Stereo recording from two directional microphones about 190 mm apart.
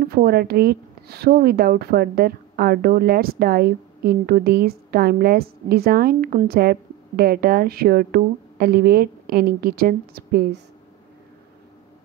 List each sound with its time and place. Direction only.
0.0 s a woman's voice: 55° right (ahead or behind)